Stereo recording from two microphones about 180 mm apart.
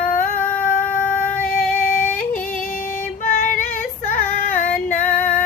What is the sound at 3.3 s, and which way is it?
Female singing, 50° left (ahead or behind).